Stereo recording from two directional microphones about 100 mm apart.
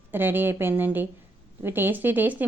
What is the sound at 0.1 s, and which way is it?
A woman's voice, 20° right (ahead or behind).